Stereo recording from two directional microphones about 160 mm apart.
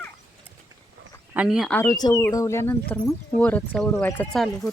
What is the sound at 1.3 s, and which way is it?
Speech, 5° right (ahead or behind).